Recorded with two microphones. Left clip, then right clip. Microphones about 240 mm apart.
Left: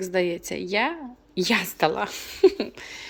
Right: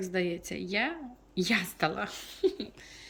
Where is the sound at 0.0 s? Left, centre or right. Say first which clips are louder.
Left 7 dB; centre.